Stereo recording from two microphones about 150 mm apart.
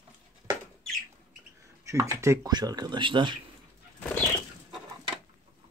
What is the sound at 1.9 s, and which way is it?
Speech, 20° right (ahead or behind).